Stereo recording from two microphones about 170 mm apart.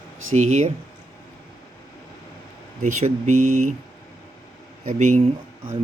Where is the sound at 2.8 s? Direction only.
45° right (ahead or behind).